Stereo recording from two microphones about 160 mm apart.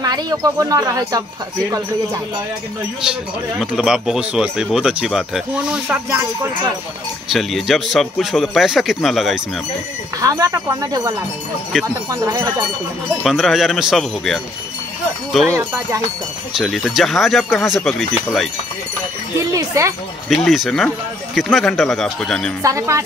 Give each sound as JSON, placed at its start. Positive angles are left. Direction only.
{"t": 0.0, "sound": "speech", "side_deg": -25}
{"t": 3.5, "sound": "speech", "side_deg": -5}
{"t": 6.0, "sound": "music", "side_deg": -15}
{"t": 7.3, "sound": "speech", "side_deg": 0}
{"t": 10.2, "sound": "speech", "side_deg": -20}
{"t": 13.2, "sound": "speech", "side_deg": 0}
{"t": 16.5, "sound": "speech", "side_deg": 0}
{"t": 19.3, "sound": "speech", "side_deg": -20}
{"t": 20.2, "sound": "speech", "side_deg": 0}
{"t": 22.6, "sound": "speech", "side_deg": -20}